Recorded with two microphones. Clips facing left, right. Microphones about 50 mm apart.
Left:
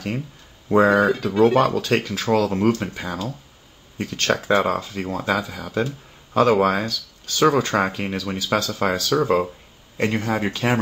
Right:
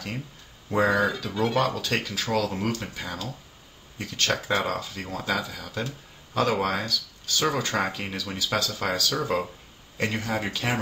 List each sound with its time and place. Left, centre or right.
0.7 s speech: left
3.0 s speech: centre